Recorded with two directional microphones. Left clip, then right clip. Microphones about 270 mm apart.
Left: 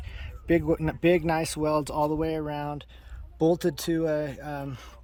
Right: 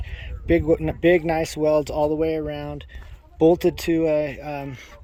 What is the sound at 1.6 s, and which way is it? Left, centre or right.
Speech, left.